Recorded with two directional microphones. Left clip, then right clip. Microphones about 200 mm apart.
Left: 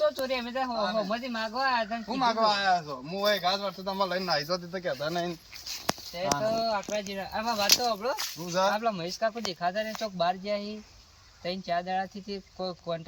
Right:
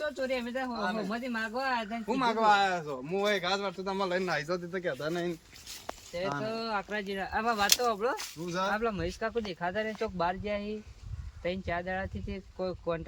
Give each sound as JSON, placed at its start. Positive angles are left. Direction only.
{"t": 0.0, "sound": "speech", "side_deg": 0}
{"t": 0.8, "sound": "speech", "side_deg": -10}
{"t": 1.1, "sound": "speech", "side_deg": 0}
{"t": 2.0, "sound": "speech", "side_deg": -20}